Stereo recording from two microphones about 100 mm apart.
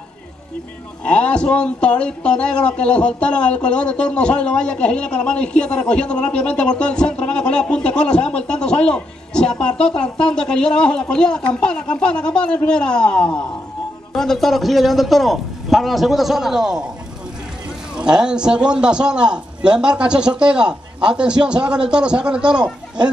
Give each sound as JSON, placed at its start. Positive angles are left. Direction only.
{"t": 1.0, "sound": "a man's voice", "side_deg": 10}
{"t": 17.9, "sound": "a man's voice", "side_deg": -10}